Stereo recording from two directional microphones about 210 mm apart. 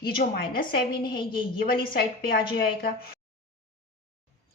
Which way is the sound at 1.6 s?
45° left (ahead or behind).